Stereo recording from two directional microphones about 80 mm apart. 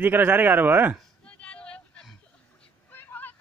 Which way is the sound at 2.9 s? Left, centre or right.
Left.